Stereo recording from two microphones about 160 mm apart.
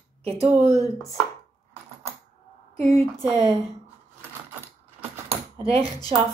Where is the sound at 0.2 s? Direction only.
40° right (ahead or behind).